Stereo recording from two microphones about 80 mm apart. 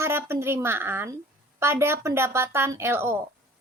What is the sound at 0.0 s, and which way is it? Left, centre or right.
A woman's voice, right.